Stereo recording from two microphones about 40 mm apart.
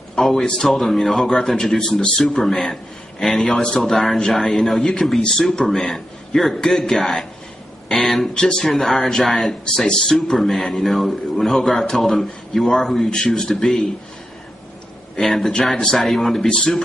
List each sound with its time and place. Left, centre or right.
0.2 s a man's voice: centre
15.1 s a man's voice: centre
16.4 s a man's voice: centre